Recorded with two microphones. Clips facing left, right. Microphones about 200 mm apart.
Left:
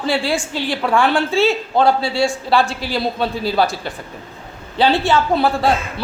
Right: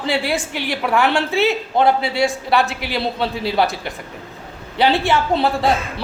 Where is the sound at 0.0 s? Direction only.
20° right (ahead or behind).